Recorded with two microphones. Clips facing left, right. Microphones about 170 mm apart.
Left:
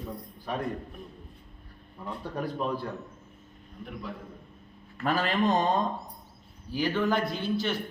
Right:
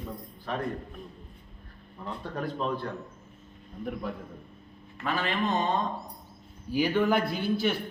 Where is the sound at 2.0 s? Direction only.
10° left (ahead or behind).